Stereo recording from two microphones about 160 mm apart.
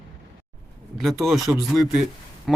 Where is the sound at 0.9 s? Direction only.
Centre (ahead or behind).